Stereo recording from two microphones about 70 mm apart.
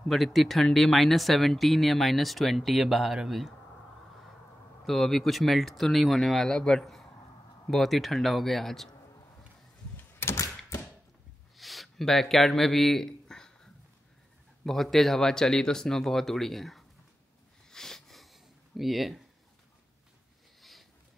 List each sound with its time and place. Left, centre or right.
0.1 s speech: centre
4.8 s speech: centre
10.3 s thunk: left
11.5 s a sound: centre
14.6 s speech: centre
17.6 s a sound: centre